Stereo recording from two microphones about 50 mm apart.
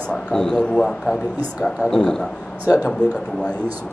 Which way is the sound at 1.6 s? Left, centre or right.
Left.